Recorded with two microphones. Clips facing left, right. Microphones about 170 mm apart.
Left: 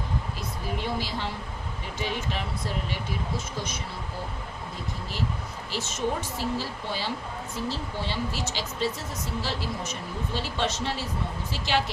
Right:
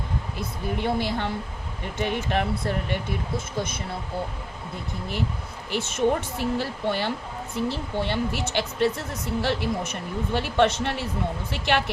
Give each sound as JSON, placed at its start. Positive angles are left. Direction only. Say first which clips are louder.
{"t": 0.3, "sound": "speech", "louder": "right 3 dB", "side_deg": -60}
{"t": 5.7, "sound": "speech", "louder": "right 6 dB", "side_deg": -60}